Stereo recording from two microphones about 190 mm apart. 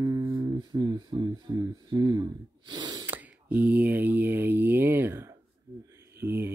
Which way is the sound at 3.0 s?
10° right (ahead or behind).